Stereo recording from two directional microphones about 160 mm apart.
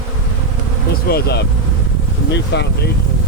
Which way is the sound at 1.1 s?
85° left.